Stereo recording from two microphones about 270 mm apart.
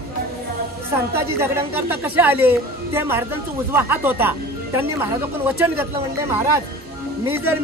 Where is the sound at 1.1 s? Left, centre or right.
Centre.